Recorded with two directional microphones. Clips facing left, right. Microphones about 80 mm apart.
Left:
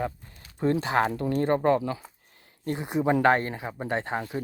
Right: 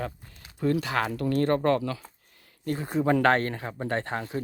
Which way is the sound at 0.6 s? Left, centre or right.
Left.